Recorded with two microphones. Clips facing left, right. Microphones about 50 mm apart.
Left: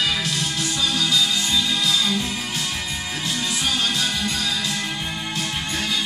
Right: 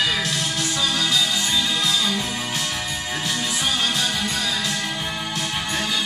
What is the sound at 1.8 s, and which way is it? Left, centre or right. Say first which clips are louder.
Music: left 1 dB; right.